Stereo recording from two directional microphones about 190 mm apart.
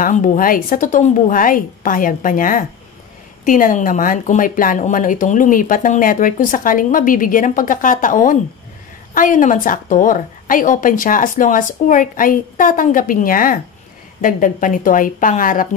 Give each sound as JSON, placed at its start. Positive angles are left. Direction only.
{"t": 0.0, "sound": "speech", "side_deg": 40}